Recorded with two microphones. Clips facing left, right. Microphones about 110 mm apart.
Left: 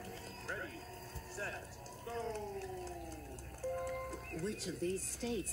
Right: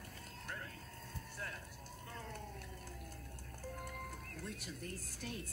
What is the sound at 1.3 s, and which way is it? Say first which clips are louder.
Clip-clop: left 5 dB; 30° left (ahead or behind).